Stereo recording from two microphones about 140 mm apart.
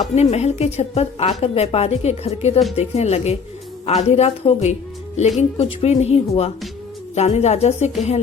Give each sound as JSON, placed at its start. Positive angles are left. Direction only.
{"t": 0.2, "sound": "a woman's voice", "side_deg": 50}